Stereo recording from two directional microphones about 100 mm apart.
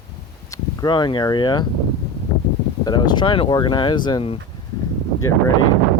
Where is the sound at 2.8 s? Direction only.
45° left (ahead or behind); by 3.5 s 60° left (ahead or behind).